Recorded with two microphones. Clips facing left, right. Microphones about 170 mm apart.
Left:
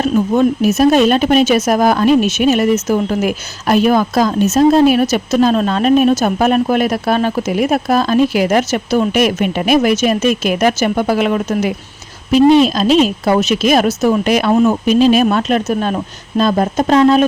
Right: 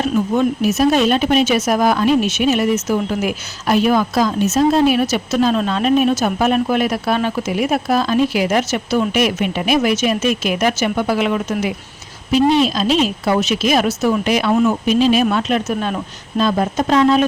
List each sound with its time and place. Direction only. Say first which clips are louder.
0.3 s speech: left 4 dB; 45° left (ahead or behind)